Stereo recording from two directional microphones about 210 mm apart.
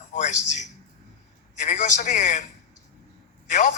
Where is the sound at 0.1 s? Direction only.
35° left (ahead or behind).